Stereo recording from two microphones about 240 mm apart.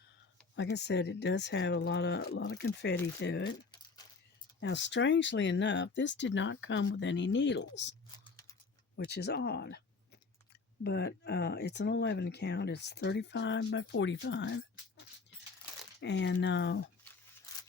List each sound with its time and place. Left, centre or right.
0.5 s speech: left
4.6 s speech: left
8.2 s a sound: centre
9.0 s speech: left
10.8 s speech: left